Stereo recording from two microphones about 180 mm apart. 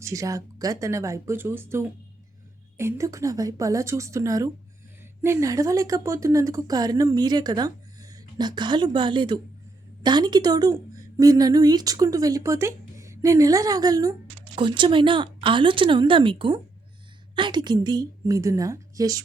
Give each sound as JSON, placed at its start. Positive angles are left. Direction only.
{"t": 0.0, "sound": "a woman's voice", "side_deg": -20}